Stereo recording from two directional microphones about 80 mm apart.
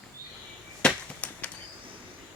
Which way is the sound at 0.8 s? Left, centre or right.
Centre.